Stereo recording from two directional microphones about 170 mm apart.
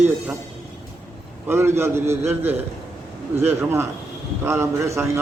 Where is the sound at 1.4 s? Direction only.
15° right (ahead or behind).